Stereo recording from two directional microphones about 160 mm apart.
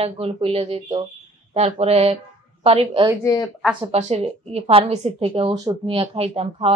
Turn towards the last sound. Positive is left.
turn(degrees=-40)  # may be behind; listen again after turning